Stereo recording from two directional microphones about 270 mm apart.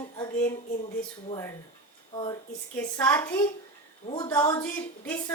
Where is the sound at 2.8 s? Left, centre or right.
Centre.